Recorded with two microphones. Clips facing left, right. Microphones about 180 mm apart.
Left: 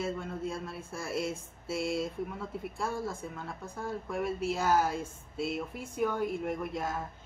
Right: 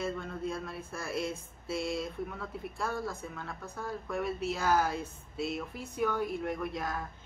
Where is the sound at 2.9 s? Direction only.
25° left (ahead or behind).